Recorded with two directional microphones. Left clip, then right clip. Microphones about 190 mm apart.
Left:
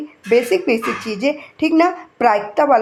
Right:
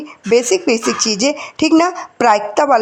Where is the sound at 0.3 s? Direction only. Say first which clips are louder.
Right 2 dB; 35° right (ahead or behind).